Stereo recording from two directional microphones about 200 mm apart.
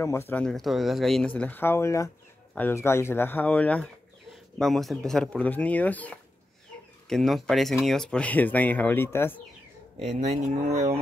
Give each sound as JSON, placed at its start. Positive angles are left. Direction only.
{"t": 0.0, "sound": "speech", "side_deg": 15}
{"t": 9.9, "sound": "speech", "side_deg": -30}